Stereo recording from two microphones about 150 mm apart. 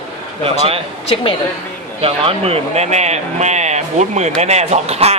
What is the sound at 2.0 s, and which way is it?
Speech, 40° right (ahead or behind).